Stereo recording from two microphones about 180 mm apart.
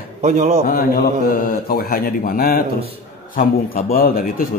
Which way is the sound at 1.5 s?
55° left (ahead or behind).